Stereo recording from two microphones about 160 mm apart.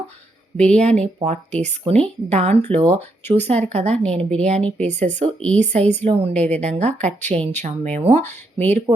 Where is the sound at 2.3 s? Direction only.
40° right (ahead or behind).